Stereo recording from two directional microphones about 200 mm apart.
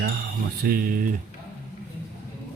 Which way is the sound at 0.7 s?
45° right (ahead or behind).